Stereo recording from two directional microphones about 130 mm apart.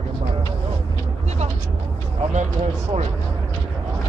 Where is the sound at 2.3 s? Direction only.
60° right (ahead or behind).